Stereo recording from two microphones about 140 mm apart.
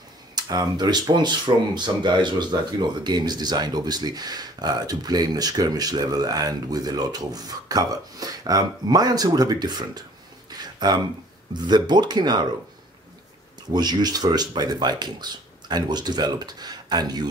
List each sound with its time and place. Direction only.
0.4 s speech: 30° right (ahead or behind)
10.5 s a sound: 30° right (ahead or behind)
11.5 s speech: 30° right (ahead or behind)
13.7 s speech: 30° right (ahead or behind)